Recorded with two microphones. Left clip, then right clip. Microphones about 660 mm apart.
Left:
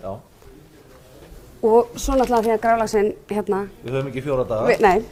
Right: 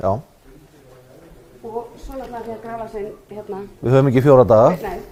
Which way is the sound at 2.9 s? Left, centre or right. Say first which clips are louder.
Left 10 dB; left.